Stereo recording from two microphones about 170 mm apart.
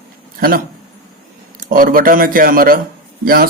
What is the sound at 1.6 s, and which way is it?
Speech, 55° right (ahead or behind).